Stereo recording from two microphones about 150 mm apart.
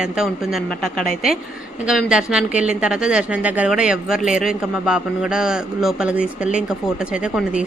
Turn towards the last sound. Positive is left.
turn(degrees=-5)  # may be behind; listen again after turning